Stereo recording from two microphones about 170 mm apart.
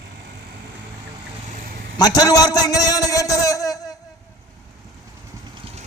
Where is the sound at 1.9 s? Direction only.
25° left (ahead or behind).